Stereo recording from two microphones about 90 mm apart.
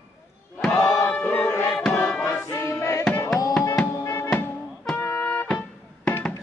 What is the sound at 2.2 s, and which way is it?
Music, 30° left (ahead or behind).